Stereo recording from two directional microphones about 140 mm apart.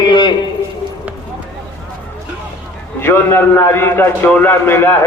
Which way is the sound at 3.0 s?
15° left (ahead or behind).